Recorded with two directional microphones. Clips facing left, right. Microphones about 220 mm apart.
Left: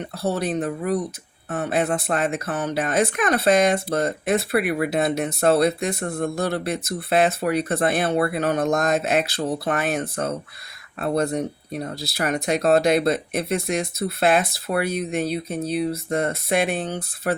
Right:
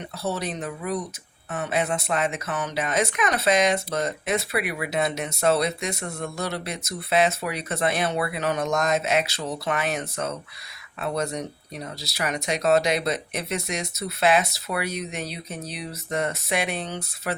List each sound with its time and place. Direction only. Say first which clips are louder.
0.2 s speech: left 5 dB; 55° left (ahead or behind)
1.5 s speech: left 3 dB; 45° left (ahead or behind)